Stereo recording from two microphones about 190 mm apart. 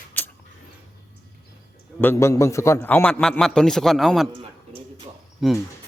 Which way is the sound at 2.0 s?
15° left (ahead or behind).